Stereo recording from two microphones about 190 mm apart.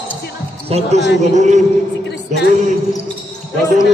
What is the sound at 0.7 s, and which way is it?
Speech, 35° right (ahead or behind).